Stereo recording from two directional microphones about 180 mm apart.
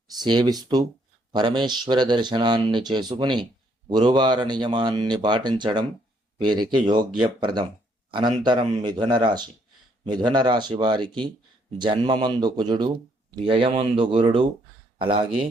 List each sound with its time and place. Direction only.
0.1 s speech: 25° right (ahead or behind)